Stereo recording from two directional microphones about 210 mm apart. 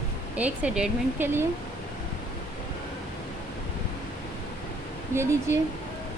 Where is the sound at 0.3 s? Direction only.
5° right (ahead or behind).